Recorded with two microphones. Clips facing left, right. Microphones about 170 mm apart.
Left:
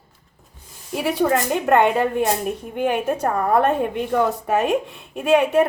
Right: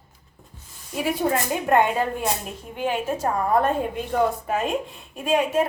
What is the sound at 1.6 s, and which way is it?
Speech, 70° left (ahead or behind).